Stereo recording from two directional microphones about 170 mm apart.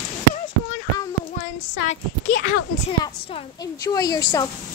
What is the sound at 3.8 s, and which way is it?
Speech, 20° left (ahead or behind).